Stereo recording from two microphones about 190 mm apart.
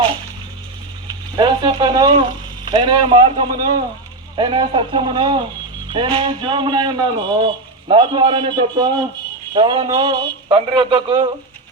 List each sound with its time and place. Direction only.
1.4 s a man's voice: 25° right (ahead or behind)